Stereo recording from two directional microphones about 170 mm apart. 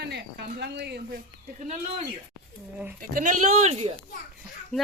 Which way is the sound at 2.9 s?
50° right (ahead or behind).